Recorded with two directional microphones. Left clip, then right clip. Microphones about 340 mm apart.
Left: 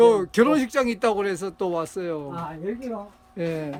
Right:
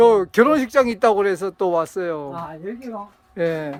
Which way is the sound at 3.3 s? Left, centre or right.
Centre.